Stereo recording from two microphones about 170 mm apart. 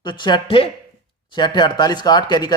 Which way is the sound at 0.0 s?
25° left (ahead or behind).